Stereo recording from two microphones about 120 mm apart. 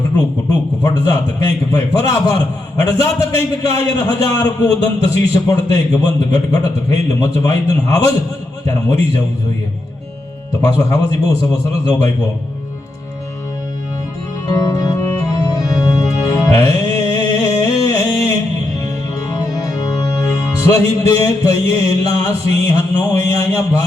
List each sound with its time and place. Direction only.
0.9 s a man's voice: 30° left (ahead or behind)
10.6 s a man's voice: 25° left (ahead or behind)
14.5 s organ: 30° left (ahead or behind)
19.5 s music: 30° left (ahead or behind)
23.3 s a man's voice: 25° left (ahead or behind)